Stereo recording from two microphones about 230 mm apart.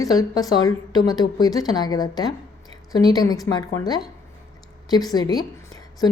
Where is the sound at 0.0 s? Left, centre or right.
Centre.